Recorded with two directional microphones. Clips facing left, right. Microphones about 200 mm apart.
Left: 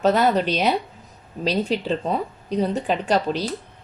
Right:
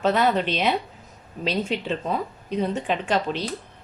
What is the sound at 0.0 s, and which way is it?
Speech, 40° left (ahead or behind).